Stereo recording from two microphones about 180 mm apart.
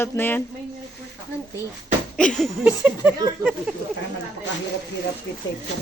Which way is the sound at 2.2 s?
5° left (ahead or behind).